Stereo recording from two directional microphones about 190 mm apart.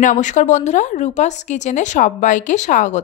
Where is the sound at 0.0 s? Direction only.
40° left (ahead or behind).